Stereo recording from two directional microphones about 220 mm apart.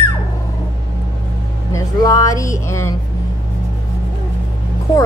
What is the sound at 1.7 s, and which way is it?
Speech, 15° left (ahead or behind).